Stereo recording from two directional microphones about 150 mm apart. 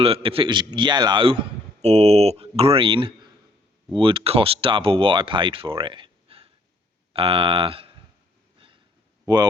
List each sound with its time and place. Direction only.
0.0 s a man's voice: 40° right (ahead or behind)
9.2 s speech: 25° right (ahead or behind)